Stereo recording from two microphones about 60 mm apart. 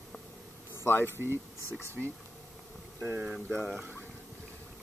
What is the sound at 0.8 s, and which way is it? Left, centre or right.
Speech, left.